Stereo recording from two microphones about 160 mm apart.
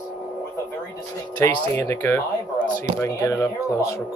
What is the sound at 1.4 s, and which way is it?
Speech, 15° left (ahead or behind).